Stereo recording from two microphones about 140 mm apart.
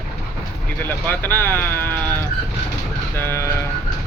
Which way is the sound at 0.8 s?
15° left (ahead or behind).